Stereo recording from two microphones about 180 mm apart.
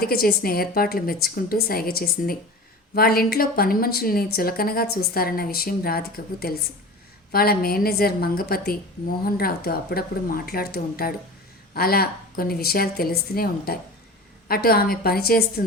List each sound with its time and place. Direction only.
0.0 s a woman's voice: 55° left (ahead or behind)